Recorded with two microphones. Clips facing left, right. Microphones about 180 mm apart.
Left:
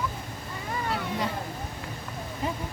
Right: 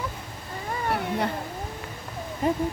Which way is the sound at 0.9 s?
60° right (ahead or behind).